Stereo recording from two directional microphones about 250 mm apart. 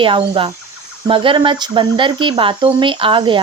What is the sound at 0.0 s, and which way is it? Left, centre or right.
Speech, centre.